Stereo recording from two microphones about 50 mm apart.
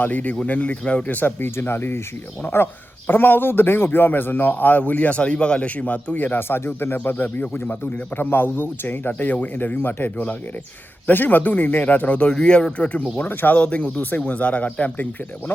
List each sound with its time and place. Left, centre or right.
0.0 s speech: left
1.0 s speech: left
1.5 s speech: left
3.1 s speech: left
13.1 s speech: left
13.6 s speech: left